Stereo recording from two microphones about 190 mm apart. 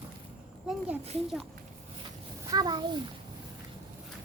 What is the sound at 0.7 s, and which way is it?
Speech, centre (ahead or behind).